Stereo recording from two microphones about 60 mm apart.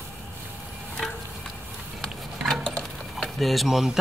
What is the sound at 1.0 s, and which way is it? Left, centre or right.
Stir, centre.